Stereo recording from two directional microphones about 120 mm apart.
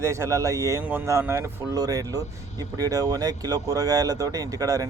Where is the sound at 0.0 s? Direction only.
25° right (ahead or behind).